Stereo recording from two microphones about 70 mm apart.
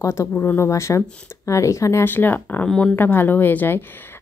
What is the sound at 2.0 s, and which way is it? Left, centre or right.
Speech, left.